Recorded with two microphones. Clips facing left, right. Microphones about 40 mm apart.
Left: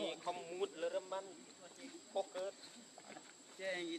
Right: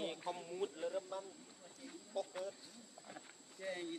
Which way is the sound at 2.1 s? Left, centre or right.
Left.